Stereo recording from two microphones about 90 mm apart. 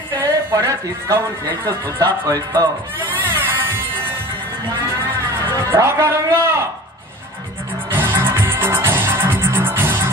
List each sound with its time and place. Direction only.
0.2 s speech: 30° right (ahead or behind)
2.0 s music: 35° right (ahead or behind)
3.1 s music: 25° right (ahead or behind)
5.7 s speech: 30° right (ahead or behind)
7.9 s music: 25° right (ahead or behind)